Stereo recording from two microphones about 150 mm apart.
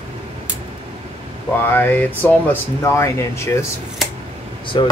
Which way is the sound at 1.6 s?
15° left (ahead or behind).